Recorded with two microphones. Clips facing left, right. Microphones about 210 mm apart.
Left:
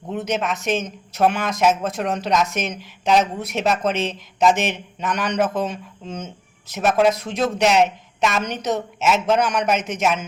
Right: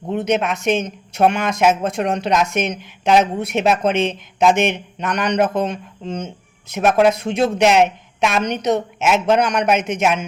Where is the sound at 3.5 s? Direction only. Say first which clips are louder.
Right 4 dB; 60° right (ahead or behind).